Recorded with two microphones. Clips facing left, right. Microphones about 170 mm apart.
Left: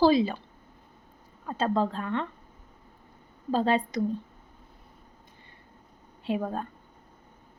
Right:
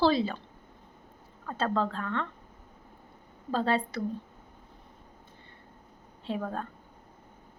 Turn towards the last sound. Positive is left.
turn(degrees=15)  # may be behind; listen again after turning